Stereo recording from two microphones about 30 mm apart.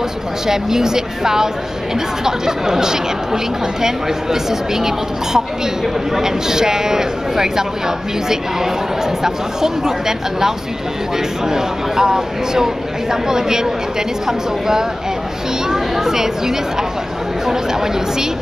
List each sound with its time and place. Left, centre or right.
0.5 s speech: centre
9.2 s speech: centre